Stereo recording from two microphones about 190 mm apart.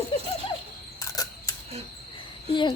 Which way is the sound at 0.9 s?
20° left (ahead or behind).